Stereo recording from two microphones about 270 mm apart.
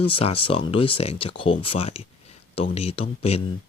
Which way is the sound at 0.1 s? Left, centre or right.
Left.